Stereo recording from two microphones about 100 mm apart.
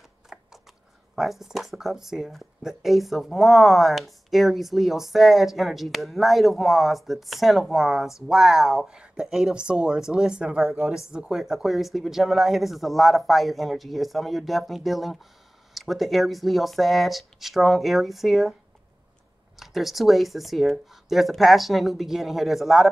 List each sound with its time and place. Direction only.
0.3 s a sound: 5° right (ahead or behind)
1.1 s speech: 5° right (ahead or behind)
19.6 s speech: centre (ahead or behind)